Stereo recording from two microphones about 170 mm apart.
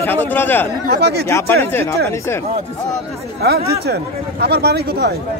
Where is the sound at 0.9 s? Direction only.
70° right (ahead or behind).